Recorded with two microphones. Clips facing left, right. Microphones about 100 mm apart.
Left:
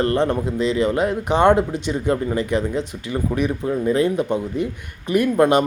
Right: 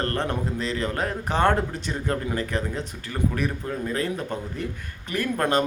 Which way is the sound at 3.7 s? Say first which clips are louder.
Left 9 dB; 20° left (ahead or behind).